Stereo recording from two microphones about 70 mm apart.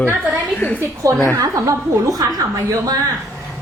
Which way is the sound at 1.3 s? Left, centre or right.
Right.